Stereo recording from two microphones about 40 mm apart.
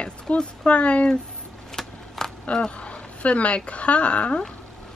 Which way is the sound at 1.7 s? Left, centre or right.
Centre.